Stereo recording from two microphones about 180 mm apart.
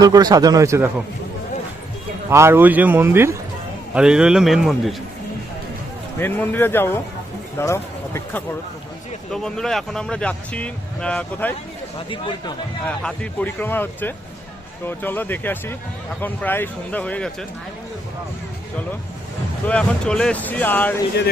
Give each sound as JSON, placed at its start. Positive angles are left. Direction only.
{"t": 0.0, "sound": "speech", "side_deg": -20}
{"t": 2.3, "sound": "speech", "side_deg": -15}
{"t": 6.1, "sound": "speech", "side_deg": 10}
{"t": 11.9, "sound": "speech", "side_deg": 30}
{"t": 12.8, "sound": "speech", "side_deg": 5}
{"t": 19.6, "sound": "speech", "side_deg": 5}